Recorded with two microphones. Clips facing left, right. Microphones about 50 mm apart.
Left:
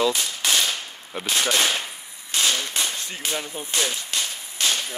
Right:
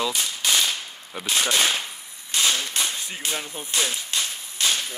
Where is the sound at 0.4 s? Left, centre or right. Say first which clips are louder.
Right 1 dB; centre.